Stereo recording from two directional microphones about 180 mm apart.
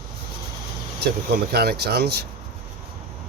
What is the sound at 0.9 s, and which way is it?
Speech, 60° right (ahead or behind).